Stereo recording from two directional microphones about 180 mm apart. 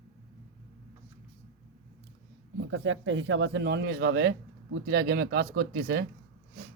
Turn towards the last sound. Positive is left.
turn(degrees=-70)  # may be behind; listen again after turning